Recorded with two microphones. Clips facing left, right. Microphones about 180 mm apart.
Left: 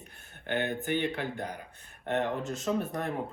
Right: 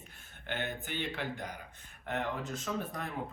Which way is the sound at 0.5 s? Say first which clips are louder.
Left 8 dB; 60° left (ahead or behind).